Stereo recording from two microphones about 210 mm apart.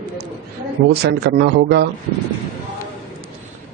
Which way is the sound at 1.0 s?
55° right (ahead or behind).